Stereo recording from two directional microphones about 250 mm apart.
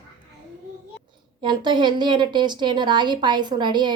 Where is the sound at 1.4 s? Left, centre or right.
Centre.